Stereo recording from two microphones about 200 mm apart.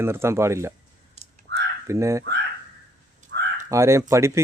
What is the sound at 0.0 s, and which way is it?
Speech, 10° right (ahead or behind).